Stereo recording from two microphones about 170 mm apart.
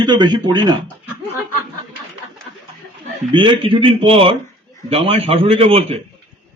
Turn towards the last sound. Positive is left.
turn(degrees=-35)  # may be behind; listen again after turning